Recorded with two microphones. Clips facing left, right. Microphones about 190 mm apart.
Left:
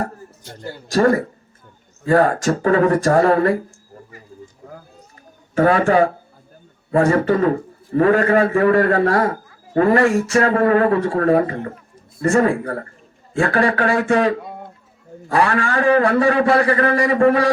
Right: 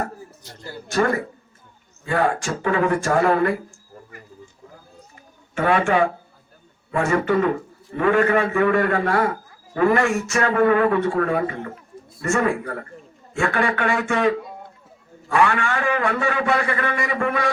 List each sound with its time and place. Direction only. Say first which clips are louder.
0.9 s a man's voice: left 5 dB; 35° left (ahead or behind)
5.5 s a man's voice: left 4 dB; 35° left (ahead or behind)